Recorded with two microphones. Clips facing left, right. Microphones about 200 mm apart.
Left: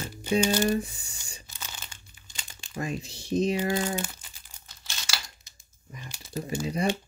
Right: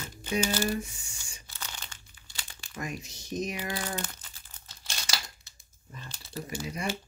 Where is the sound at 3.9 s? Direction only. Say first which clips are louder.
Left 4 dB; 10° left (ahead or behind).